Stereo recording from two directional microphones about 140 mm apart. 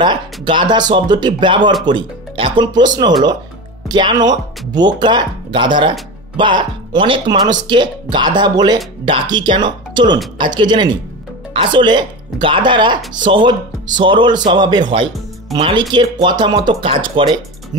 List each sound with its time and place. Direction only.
0.0 s speech: 35° right (ahead or behind)